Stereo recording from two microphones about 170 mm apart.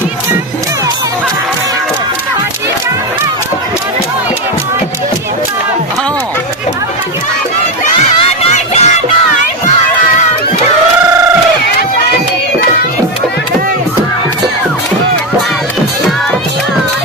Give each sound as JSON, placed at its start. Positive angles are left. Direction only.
{"t": 8.2, "sound": "crowd", "side_deg": 40}